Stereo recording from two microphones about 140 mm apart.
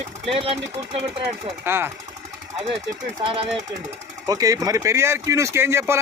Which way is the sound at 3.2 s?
40° right (ahead or behind).